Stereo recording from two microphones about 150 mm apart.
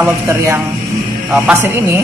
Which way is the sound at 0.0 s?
20° right (ahead or behind).